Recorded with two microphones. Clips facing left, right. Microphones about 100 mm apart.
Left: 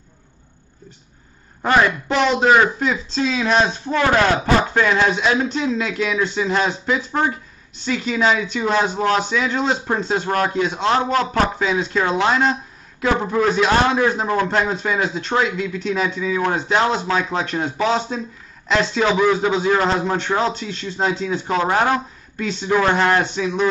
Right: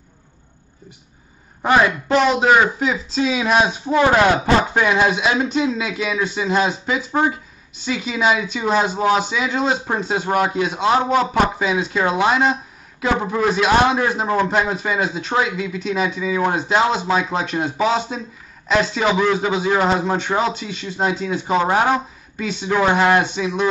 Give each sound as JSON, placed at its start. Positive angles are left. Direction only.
{"t": 1.6, "sound": "speech", "side_deg": -10}